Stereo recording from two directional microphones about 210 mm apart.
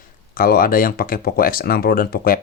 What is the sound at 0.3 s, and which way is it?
Speech, 45° left (ahead or behind).